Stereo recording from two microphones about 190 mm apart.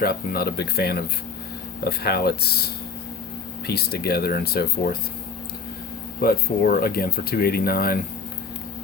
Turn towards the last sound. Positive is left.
turn(degrees=50)  # may be behind; listen again after turning